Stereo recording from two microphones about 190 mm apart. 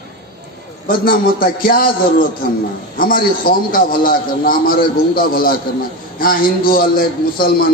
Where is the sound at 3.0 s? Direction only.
50° left (ahead or behind).